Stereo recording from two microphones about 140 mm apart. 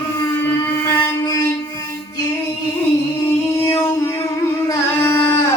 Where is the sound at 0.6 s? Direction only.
15° left (ahead or behind).